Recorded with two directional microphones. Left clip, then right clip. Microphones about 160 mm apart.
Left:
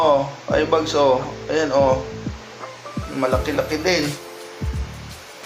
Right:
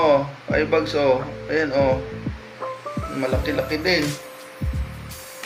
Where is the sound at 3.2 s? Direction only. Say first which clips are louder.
Left 4 dB; 20° right (ahead or behind).